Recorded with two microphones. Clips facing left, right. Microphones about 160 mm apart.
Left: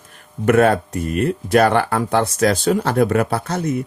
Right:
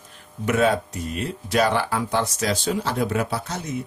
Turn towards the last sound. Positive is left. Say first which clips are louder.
# left 7 dB
turn(degrees=60)  # may be behind; listen again after turning